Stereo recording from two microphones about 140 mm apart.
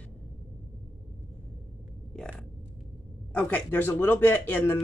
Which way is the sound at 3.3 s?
15° left (ahead or behind).